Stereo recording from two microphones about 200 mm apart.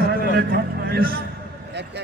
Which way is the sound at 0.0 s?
50° right (ahead or behind).